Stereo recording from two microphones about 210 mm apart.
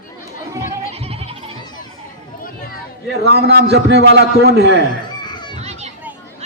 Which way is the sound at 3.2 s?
50° right (ahead or behind).